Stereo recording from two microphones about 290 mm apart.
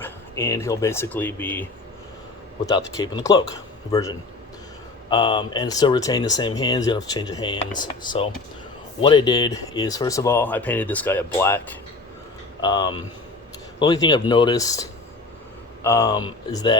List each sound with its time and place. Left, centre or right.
0.0 s speech: centre
2.6 s speech: centre